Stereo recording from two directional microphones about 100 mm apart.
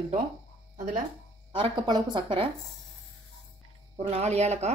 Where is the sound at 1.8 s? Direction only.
45° right (ahead or behind).